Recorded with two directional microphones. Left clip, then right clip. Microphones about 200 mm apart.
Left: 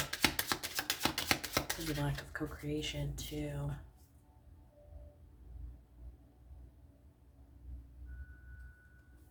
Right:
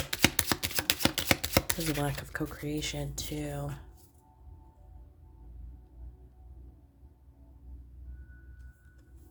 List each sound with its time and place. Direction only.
0.1 s chopping: 45° right (ahead or behind)